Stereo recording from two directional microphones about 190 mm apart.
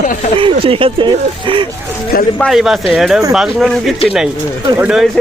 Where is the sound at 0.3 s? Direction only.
30° right (ahead or behind).